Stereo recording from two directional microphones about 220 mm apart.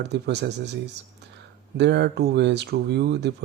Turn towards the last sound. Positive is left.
turn(degrees=-50)  # may be behind; listen again after turning